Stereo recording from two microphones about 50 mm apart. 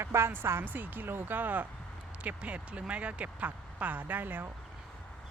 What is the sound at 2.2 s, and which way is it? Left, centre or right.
Speech, right.